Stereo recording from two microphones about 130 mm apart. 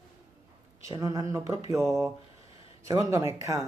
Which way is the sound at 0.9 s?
25° right (ahead or behind).